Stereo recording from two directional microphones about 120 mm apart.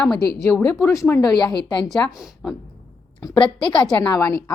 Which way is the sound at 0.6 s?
25° left (ahead or behind).